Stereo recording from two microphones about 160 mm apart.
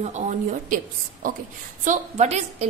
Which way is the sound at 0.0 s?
50° right (ahead or behind).